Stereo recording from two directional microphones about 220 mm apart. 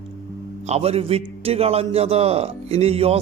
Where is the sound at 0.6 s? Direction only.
30° right (ahead or behind).